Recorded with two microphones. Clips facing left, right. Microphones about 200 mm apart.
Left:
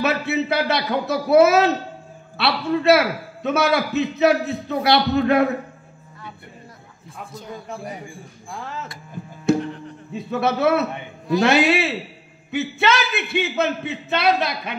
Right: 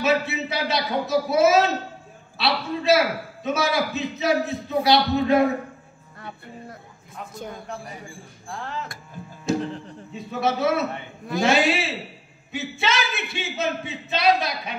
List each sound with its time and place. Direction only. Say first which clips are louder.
0.0 s speech: left 1 dB; 60° left (ahead or behind)
9.5 s music: left 5 dB; 60° left (ahead or behind)
10.4 s speech: left 3 dB; 60° left (ahead or behind)